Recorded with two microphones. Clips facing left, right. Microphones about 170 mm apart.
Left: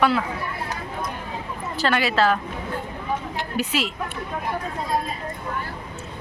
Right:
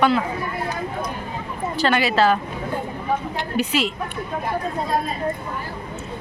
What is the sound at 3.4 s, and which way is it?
Speech, centre (ahead or behind).